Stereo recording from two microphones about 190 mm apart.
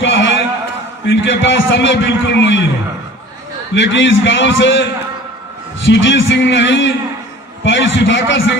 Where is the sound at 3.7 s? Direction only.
75° left (ahead or behind).